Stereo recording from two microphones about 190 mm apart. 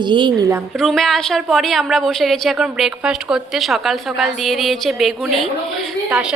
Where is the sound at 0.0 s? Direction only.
25° right (ahead or behind).